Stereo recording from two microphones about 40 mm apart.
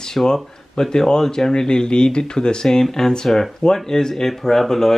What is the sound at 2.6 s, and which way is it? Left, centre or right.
Speech, centre.